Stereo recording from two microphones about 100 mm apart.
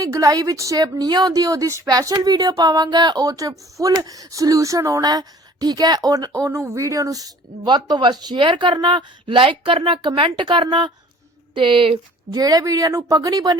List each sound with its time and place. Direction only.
0.0 s speech: 35° right (ahead or behind); by 11.9 s 60° right (ahead or behind)
12.3 s speech: 40° right (ahead or behind)